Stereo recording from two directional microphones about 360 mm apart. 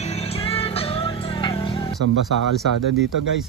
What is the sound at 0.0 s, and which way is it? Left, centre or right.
Music, centre.